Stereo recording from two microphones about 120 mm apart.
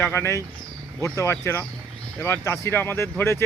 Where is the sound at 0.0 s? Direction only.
20° left (ahead or behind).